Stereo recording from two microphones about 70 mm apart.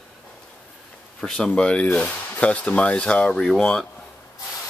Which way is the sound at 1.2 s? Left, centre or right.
Centre.